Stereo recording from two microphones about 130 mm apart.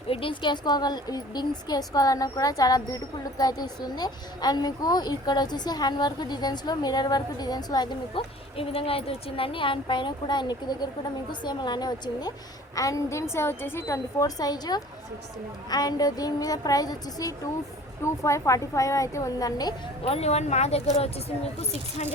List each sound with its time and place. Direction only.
0.1 s a woman's voice: 40° left (ahead or behind)
8.5 s a woman's voice: 45° left (ahead or behind); by 19.7 s 30° left (ahead or behind)
20.1 s speech: 50° left (ahead or behind)